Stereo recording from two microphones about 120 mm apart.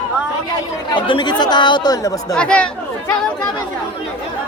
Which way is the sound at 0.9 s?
40° left (ahead or behind).